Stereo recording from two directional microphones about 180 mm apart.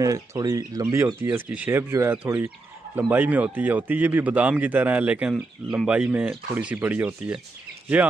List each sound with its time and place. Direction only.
0.0 s a man's voice: 20° right (ahead or behind)